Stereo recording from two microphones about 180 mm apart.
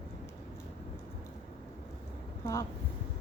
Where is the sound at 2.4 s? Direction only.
20° left (ahead or behind).